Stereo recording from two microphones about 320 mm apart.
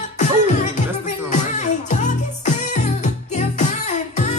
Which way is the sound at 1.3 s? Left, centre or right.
Left.